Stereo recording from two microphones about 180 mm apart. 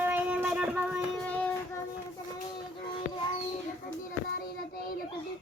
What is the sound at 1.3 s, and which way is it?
Child singing, 5° left (ahead or behind).